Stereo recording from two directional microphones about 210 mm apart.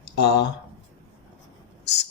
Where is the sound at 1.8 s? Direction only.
55° left (ahead or behind).